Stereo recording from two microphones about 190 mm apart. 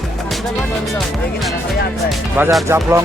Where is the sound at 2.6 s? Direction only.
15° right (ahead or behind).